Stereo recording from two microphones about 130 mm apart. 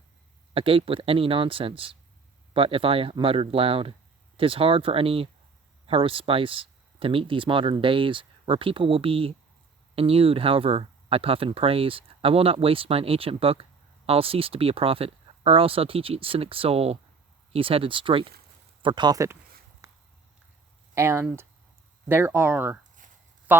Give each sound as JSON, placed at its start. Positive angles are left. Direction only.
{"t": 0.5, "sound": "speech", "side_deg": -45}
{"t": 20.9, "sound": "speech", "side_deg": -20}